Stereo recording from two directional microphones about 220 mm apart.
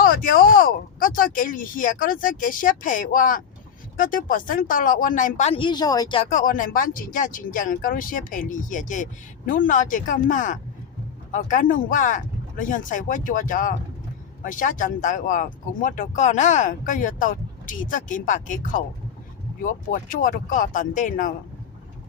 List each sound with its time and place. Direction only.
0.0 s speech: 40° left (ahead or behind); by 6.2 s 20° left (ahead or behind)
6.3 s speech: 40° left (ahead or behind)